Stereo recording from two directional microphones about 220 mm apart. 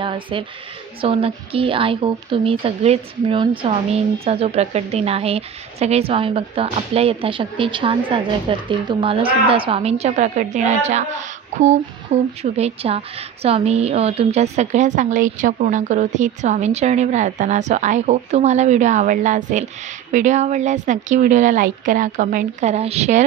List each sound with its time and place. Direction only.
0.0 s a woman's voice: 25° right (ahead or behind)